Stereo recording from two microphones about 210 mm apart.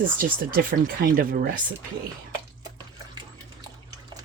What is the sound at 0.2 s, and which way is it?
Speech, 45° right (ahead or behind).